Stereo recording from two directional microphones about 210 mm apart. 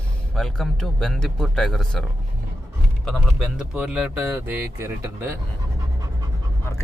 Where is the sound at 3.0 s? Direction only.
Centre (ahead or behind).